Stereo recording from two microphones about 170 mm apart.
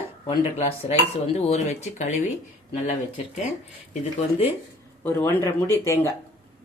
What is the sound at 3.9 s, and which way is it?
Speech, 45° left (ahead or behind).